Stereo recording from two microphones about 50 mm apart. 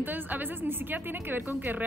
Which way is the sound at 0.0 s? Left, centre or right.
Right.